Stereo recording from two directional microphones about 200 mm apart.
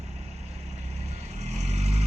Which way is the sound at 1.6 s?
35° right (ahead or behind).